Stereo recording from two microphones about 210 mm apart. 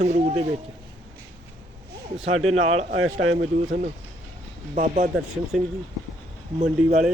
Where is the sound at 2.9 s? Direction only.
75° right (ahead or behind).